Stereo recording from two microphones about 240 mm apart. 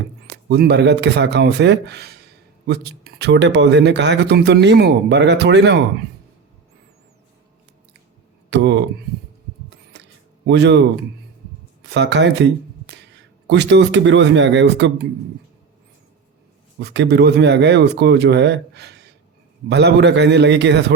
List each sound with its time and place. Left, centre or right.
0.4 s speech: right
8.4 s speech: right
9.9 s a sound: right
10.4 s speech: right
11.8 s speech: right
13.5 s speech: right
16.8 s speech: right